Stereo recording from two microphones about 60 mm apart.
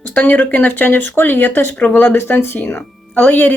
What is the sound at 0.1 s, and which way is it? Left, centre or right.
Speech, left.